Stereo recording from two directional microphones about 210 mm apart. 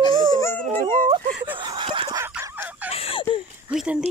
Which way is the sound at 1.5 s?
25° right (ahead or behind).